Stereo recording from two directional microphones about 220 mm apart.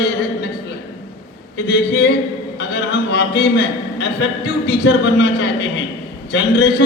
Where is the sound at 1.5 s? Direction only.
50° left (ahead or behind).